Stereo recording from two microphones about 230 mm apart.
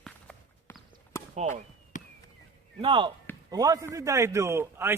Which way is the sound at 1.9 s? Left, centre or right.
Left.